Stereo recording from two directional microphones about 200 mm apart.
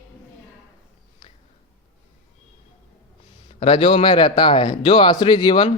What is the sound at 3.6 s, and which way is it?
Speech, 25° left (ahead or behind).